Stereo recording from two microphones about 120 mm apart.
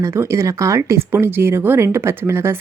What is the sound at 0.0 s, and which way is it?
Speech, 25° right (ahead or behind).